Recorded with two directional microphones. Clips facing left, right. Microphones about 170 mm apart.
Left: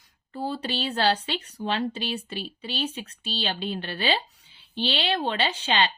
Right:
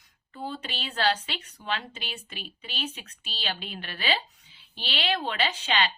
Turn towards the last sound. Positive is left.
turn(degrees=30)  # may be behind; listen again after turning